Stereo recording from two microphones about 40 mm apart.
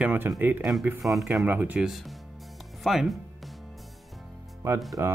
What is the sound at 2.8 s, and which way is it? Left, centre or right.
Speech, centre.